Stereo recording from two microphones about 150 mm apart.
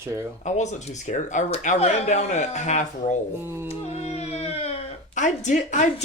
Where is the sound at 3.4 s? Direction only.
15° right (ahead or behind).